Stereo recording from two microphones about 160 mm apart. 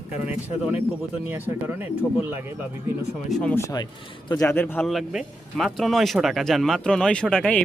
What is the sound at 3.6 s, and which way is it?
A man's voice, 25° left (ahead or behind).